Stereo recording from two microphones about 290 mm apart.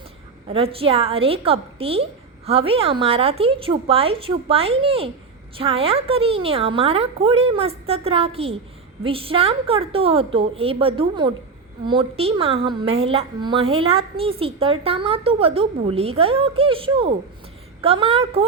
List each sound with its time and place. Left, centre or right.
0.4 s a woman's voice: centre